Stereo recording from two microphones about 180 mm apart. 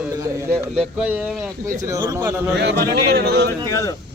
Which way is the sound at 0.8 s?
5° right (ahead or behind).